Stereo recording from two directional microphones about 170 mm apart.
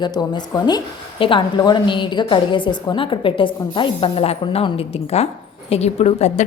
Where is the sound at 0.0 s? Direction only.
25° left (ahead or behind).